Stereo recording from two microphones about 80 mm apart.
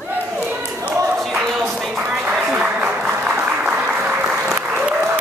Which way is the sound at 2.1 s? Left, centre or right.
Centre.